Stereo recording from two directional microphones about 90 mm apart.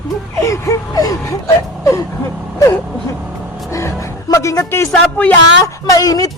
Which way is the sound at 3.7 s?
35° left (ahead or behind).